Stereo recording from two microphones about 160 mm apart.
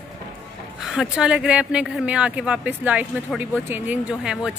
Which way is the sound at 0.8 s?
5° right (ahead or behind).